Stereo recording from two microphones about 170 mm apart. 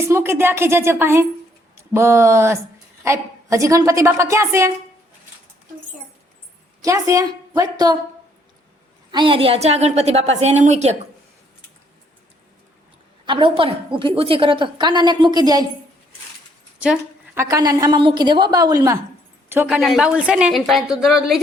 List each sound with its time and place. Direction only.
0.1 s a woman's voice: 15° right (ahead or behind)
6.8 s a woman's voice: 20° right (ahead or behind)
9.1 s a woman's voice: 30° right (ahead or behind)
13.2 s a woman's voice: 30° right (ahead or behind)
16.8 s a sound: 5° right (ahead or behind)
17.4 s a woman's voice: 20° right (ahead or behind); by 21.4 s centre (ahead or behind)